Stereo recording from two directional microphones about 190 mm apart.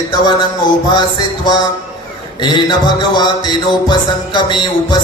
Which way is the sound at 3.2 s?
25° left (ahead or behind).